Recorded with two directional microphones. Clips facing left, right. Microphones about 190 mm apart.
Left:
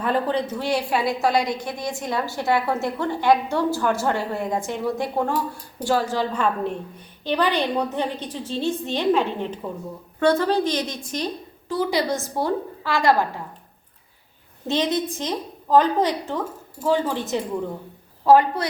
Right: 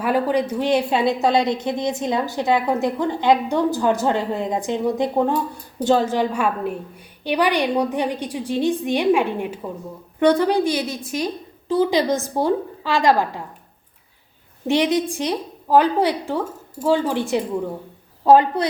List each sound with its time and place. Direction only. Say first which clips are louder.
0.0 s a woman's voice: right 3 dB; 10° right (ahead or behind)
11.7 s a woman's voice: right 5 dB; 20° right (ahead or behind)
14.7 s a woman's voice: right 4 dB; 15° right (ahead or behind)